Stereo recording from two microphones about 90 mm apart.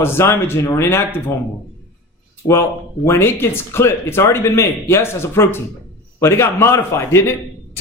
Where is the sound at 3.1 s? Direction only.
30° left (ahead or behind).